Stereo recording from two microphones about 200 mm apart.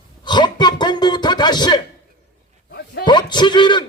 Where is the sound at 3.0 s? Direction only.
20° left (ahead or behind).